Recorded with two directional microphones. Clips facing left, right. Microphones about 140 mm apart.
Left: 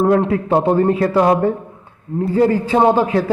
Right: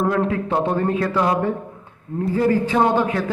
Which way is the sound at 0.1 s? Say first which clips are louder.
Left 6 dB; 35° left (ahead or behind).